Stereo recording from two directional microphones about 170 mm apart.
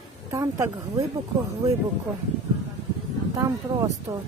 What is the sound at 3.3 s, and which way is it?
Speech, 20° right (ahead or behind).